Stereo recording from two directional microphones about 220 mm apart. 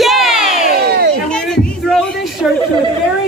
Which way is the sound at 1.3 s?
Centre (ahead or behind).